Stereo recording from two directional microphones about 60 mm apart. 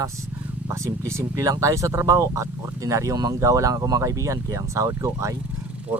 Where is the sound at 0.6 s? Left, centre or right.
Right.